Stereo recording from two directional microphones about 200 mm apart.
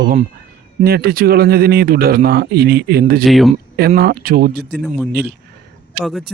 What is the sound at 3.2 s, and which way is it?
Speech, centre (ahead or behind).